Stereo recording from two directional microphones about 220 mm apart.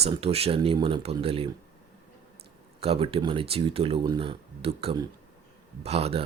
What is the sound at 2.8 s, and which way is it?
Speech, 25° right (ahead or behind).